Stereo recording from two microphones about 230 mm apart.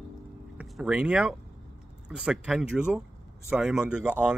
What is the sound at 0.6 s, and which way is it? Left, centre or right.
Speech, centre.